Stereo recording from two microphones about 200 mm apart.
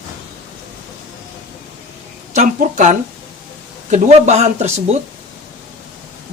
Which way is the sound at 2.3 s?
35° right (ahead or behind).